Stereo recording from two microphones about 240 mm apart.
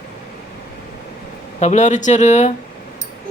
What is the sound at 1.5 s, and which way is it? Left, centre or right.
Speech, left.